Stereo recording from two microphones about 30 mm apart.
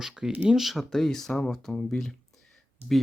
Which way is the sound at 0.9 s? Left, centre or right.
Centre.